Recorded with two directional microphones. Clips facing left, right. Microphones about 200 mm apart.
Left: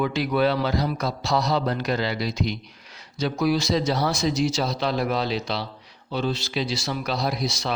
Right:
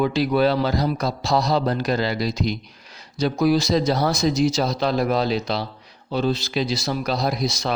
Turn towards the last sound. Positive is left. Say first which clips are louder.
# right 3 dB
turn(degrees=-40)  # may be behind; listen again after turning